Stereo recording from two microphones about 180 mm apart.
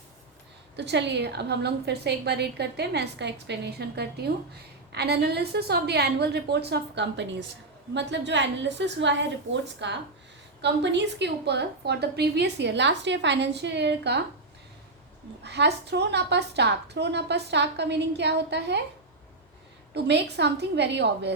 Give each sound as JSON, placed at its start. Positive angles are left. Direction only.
{"t": 0.8, "sound": "a woman's voice", "side_deg": -70}
{"t": 15.4, "sound": "a woman's voice", "side_deg": -70}
{"t": 19.9, "sound": "a woman's voice", "side_deg": -70}